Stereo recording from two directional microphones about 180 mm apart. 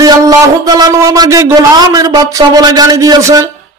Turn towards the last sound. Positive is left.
turn(degrees=-20)  # may be behind; listen again after turning